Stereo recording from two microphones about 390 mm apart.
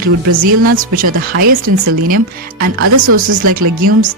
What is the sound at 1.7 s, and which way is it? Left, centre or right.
Speech, right.